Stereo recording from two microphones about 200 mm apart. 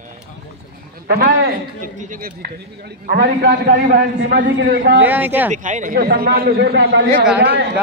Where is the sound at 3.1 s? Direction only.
55° right (ahead or behind).